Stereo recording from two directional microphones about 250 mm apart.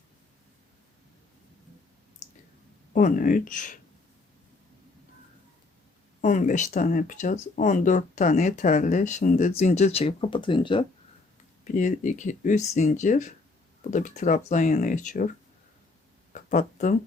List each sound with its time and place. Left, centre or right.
2.9 s speech: left
6.2 s speech: left
11.6 s speech: left
16.3 s a sound: left